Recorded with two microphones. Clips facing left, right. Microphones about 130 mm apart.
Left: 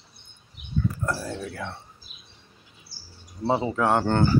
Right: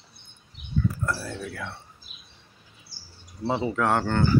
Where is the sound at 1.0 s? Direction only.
20° left (ahead or behind).